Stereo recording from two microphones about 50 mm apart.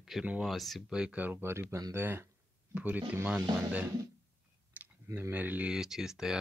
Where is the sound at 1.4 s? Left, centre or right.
Right.